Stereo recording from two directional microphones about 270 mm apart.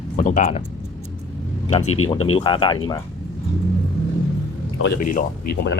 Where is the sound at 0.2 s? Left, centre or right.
Left.